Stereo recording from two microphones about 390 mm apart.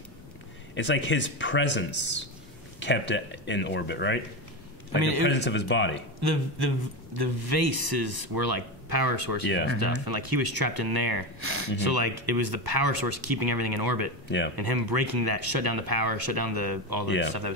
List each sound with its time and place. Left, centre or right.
0.7 s speech: left
4.9 s a man's voice: right
5.3 s speech: left
6.2 s a man's voice: right
9.4 s speech: left
10.0 s speech: right